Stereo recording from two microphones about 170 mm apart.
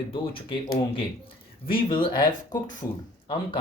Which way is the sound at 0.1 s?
30° left (ahead or behind).